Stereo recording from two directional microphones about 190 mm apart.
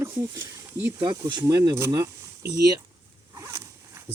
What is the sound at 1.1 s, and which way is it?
Speech, 25° right (ahead or behind).